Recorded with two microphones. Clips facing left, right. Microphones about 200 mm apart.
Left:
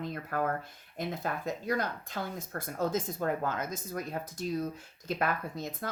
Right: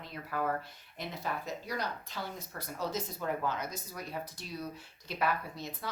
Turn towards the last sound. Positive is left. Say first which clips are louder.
# left 4 dB
turn(degrees=45)  # may be behind; listen again after turning